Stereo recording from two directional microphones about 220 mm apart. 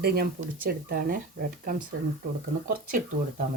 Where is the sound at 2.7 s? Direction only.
40° right (ahead or behind).